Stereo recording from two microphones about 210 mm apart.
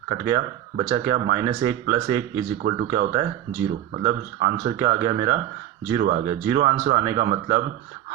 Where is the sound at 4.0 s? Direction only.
25° right (ahead or behind).